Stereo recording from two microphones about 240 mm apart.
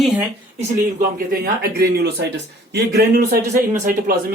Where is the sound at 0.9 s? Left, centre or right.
Right.